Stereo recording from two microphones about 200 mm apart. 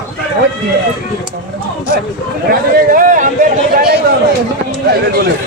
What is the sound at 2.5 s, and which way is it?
A man's voice, 45° right (ahead or behind).